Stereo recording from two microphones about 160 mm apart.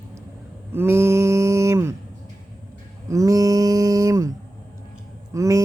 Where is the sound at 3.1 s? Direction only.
20° right (ahead or behind).